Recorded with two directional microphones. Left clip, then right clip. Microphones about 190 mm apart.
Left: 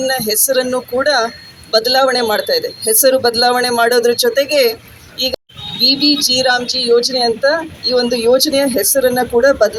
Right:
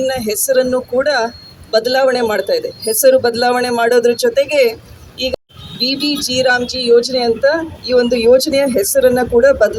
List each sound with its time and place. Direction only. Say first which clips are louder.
0.0 s speech: left 1 dB; 20° right (ahead or behind)
5.8 s speech: left 5 dB; 20° right (ahead or behind)